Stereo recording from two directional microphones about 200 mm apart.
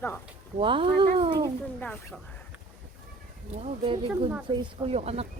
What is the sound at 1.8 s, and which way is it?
Speech, 10° left (ahead or behind).